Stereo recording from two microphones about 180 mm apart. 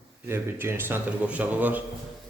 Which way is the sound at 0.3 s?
10° right (ahead or behind).